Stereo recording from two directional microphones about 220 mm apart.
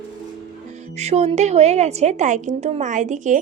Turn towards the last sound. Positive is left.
turn(degrees=-35)  # may be behind; listen again after turning